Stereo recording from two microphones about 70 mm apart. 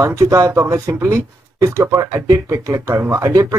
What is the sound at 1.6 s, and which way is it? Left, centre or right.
Speech, right.